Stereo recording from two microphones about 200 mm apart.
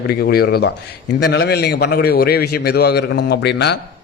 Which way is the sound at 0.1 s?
50° left (ahead or behind).